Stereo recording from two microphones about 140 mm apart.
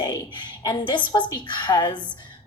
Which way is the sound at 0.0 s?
30° left (ahead or behind).